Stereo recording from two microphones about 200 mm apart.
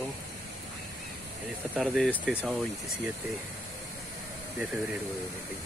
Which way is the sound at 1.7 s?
Centre (ahead or behind).